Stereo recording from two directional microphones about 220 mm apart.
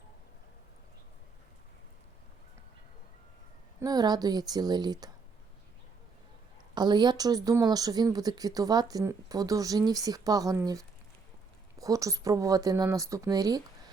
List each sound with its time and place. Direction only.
3.8 s speech: 15° right (ahead or behind)
6.7 s speech: 20° right (ahead or behind)